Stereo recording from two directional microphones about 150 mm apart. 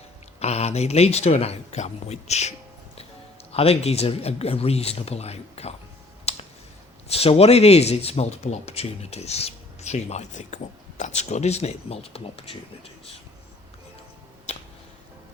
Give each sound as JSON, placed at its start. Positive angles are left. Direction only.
{"t": 0.3, "sound": "speech", "side_deg": 45}
{"t": 3.5, "sound": "speech", "side_deg": 40}
{"t": 6.3, "sound": "clicking", "side_deg": 45}
{"t": 7.1, "sound": "speech", "side_deg": 40}